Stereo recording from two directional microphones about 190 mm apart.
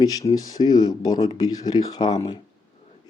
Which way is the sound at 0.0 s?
20° left (ahead or behind).